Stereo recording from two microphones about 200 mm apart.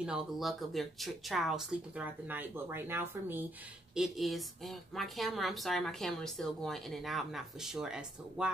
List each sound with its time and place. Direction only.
0.0 s speech: centre (ahead or behind)